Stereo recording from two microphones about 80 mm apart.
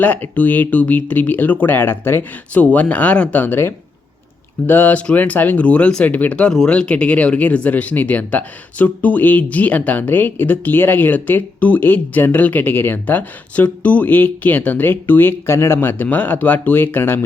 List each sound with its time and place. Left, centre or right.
0.0 s speech: left